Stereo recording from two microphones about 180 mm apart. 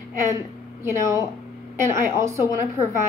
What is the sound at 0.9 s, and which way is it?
A woman's voice, 15° right (ahead or behind).